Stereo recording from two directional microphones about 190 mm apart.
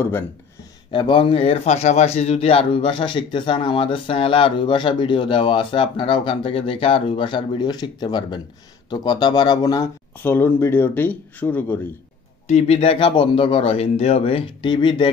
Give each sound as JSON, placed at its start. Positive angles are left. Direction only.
{"t": 0.9, "sound": "a man's voice", "side_deg": 25}
{"t": 12.4, "sound": "a man's voice", "side_deg": 35}